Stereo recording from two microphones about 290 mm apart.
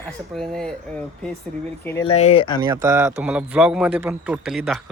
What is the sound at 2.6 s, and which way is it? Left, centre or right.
A man's voice, centre.